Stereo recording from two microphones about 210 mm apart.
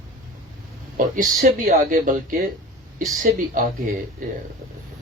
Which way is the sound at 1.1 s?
40° right (ahead or behind).